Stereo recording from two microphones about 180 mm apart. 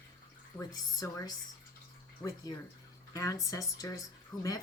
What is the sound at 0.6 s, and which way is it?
Speech, 20° left (ahead or behind).